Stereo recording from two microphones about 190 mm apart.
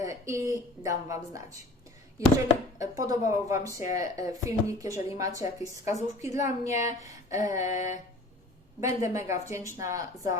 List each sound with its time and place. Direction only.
0.0 s speech: 15° right (ahead or behind)
2.7 s speech: 20° right (ahead or behind)
6.4 s a woman's voice: 40° left (ahead or behind)
6.8 s speech: 15° right (ahead or behind)
7.7 s a woman's voice: 40° left (ahead or behind)
8.8 s speech: 15° right (ahead or behind)